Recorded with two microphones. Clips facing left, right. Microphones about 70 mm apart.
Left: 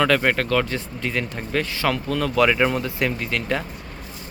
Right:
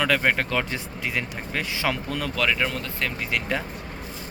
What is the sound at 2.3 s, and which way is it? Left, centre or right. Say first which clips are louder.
Speech: left 7 dB; centre.